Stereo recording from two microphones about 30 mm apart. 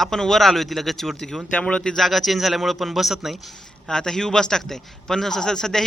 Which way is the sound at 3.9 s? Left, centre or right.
Centre.